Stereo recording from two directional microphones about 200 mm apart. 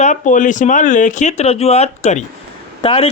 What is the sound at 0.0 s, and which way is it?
Speech, 40° left (ahead or behind).